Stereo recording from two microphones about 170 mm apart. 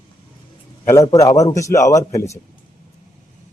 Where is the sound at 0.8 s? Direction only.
20° left (ahead or behind).